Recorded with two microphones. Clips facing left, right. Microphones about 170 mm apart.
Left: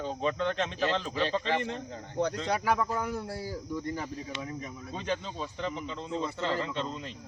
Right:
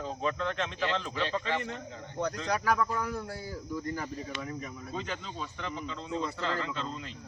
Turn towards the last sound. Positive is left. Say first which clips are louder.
# left 2 dB
turn(degrees=25)  # may be behind; listen again after turning